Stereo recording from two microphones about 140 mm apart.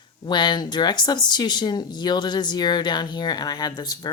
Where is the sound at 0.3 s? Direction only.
30° left (ahead or behind).